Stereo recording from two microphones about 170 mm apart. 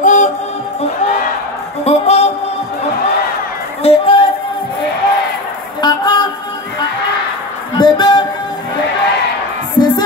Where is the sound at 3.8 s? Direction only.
35° left (ahead or behind).